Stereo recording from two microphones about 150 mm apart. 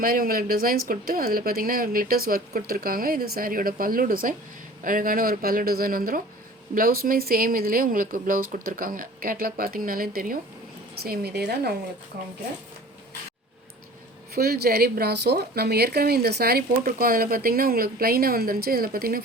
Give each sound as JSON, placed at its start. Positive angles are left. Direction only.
{"t": 0.0, "sound": "speech", "side_deg": -70}
{"t": 10.9, "sound": "a woman's voice", "side_deg": -90}
{"t": 14.3, "sound": "a woman's voice", "side_deg": -90}